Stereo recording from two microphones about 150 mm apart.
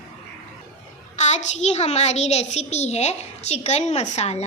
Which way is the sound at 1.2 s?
50° left (ahead or behind).